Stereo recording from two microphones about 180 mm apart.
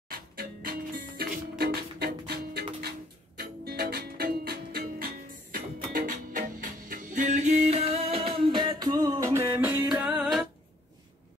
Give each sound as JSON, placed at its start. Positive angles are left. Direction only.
{"t": 0.1, "sound": "music", "side_deg": -55}